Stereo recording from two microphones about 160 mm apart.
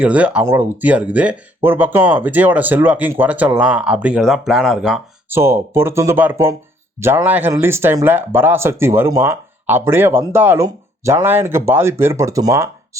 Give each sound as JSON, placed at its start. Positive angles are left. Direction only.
{"t": 0.0, "sound": "speech", "side_deg": -10}
{"t": 5.3, "sound": "speech", "side_deg": -15}